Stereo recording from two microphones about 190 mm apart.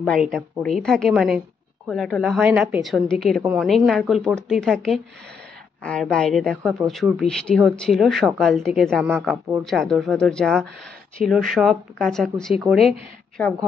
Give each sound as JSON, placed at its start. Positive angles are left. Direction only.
{"t": 0.0, "sound": "a woman's voice", "side_deg": 0}